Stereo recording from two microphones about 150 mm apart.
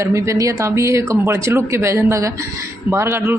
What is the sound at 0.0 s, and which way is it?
Speech, 20° right (ahead or behind).